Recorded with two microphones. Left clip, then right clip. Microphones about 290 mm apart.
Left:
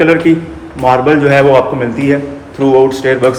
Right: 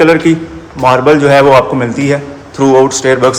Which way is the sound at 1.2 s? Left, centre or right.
Right.